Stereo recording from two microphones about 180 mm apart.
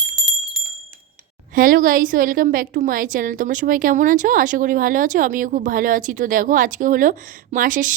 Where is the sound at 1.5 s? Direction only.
50° right (ahead or behind).